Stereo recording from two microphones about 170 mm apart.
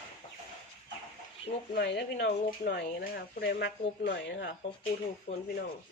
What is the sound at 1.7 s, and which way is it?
Speech, 75° left (ahead or behind).